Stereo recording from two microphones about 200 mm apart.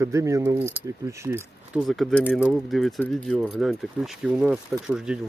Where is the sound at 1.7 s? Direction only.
Centre (ahead or behind).